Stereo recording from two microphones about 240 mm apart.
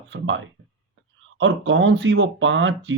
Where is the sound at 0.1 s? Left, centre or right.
Right.